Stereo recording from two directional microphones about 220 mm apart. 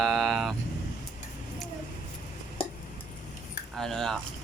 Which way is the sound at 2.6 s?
25° left (ahead or behind).